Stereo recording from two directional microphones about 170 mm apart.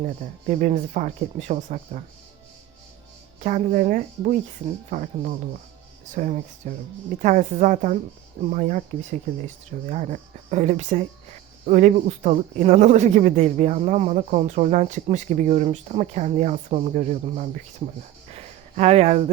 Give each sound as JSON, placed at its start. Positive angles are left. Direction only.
{"t": 0.0, "sound": "speech", "side_deg": -45}
{"t": 3.4, "sound": "speech", "side_deg": -50}
{"t": 18.3, "sound": "a sound", "side_deg": -40}